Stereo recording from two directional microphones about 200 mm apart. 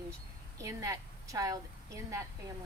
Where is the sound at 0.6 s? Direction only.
15° right (ahead or behind).